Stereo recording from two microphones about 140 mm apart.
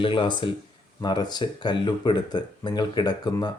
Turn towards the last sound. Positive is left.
turn(degrees=30)  # may be behind; listen again after turning